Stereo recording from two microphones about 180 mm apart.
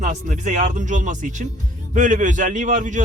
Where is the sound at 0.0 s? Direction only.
45° right (ahead or behind).